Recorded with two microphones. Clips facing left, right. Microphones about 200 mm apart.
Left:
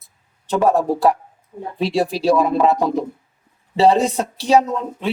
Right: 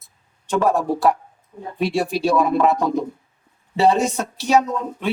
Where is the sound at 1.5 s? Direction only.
45° left (ahead or behind).